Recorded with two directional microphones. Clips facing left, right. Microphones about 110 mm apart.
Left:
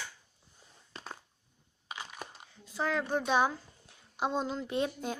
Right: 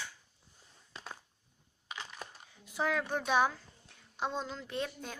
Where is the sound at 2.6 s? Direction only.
15° right (ahead or behind).